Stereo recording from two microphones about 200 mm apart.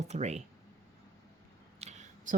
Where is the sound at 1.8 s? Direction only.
35° right (ahead or behind).